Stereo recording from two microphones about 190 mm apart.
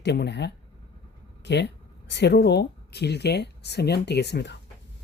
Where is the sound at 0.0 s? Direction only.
65° left (ahead or behind).